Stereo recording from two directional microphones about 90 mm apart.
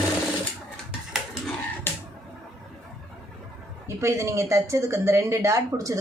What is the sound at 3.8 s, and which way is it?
Speech, 35° right (ahead or behind).